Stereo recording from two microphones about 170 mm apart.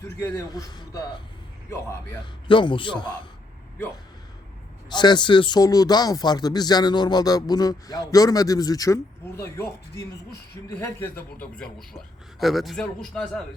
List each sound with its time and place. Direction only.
0.2 s speech: 20° left (ahead or behind)
2.5 s speech: 30° left (ahead or behind)
4.9 s a man's voice: 25° left (ahead or behind); by 13.4 s 5° left (ahead or behind)